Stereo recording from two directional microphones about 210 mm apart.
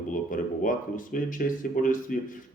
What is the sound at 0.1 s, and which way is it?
A man's voice, 40° left (ahead or behind).